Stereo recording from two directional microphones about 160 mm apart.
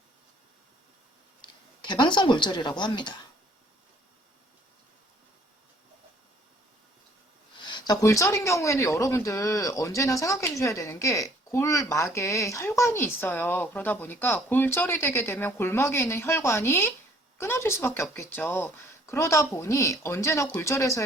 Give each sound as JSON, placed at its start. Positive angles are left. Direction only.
{"t": 1.4, "sound": "speech", "side_deg": 30}
{"t": 7.6, "sound": "speech", "side_deg": 25}